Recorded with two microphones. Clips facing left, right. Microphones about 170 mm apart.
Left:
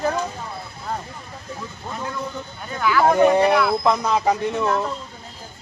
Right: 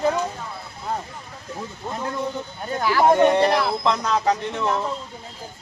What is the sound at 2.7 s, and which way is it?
Speech, 35° right (ahead or behind).